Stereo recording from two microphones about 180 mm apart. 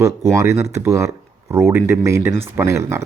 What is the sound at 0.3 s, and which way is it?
Speech, 15° right (ahead or behind).